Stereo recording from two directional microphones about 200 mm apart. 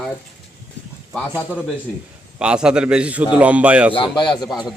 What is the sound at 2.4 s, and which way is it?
A man's voice, 5° right (ahead or behind).